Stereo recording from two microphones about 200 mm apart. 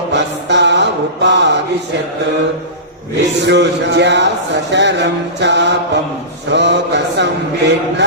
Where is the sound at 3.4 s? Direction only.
60° right (ahead or behind).